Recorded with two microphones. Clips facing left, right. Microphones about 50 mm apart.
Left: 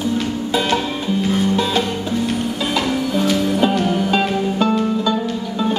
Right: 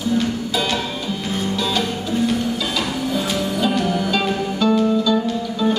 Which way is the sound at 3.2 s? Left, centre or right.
Left.